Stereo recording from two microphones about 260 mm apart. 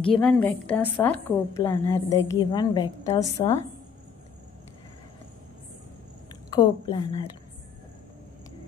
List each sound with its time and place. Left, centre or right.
0.1 s a woman's voice: centre
6.5 s a woman's voice: centre